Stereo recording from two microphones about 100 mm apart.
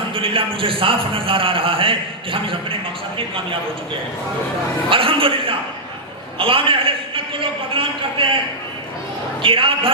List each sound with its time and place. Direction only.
0.1 s a man's voice: 60° right (ahead or behind)
4.9 s a man's voice: 60° right (ahead or behind)
9.4 s a man's voice: 60° right (ahead or behind)